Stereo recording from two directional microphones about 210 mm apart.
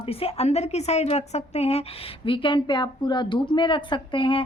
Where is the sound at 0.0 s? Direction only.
25° left (ahead or behind).